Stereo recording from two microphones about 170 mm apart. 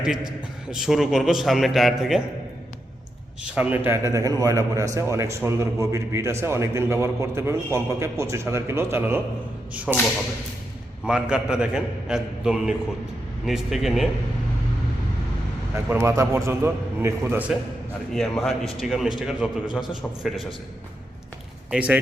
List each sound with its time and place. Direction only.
0.7 s a man's voice: centre (ahead or behind)
3.4 s a man's voice: 5° right (ahead or behind)
9.9 s a man's voice: 5° right (ahead or behind)
15.7 s a man's voice: 15° right (ahead or behind)
18.1 s a man's voice: centre (ahead or behind)
21.7 s a man's voice: 10° right (ahead or behind)